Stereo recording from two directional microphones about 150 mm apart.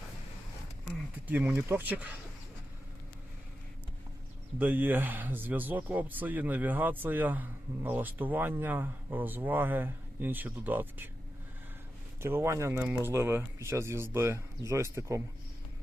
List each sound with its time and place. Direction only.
1.3 s speech: 15° right (ahead or behind)
4.5 s speech: 10° right (ahead or behind)
12.2 s speech: 15° right (ahead or behind)